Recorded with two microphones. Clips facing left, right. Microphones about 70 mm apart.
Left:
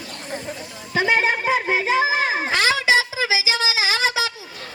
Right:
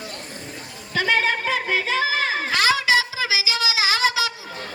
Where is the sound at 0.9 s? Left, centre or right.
Centre.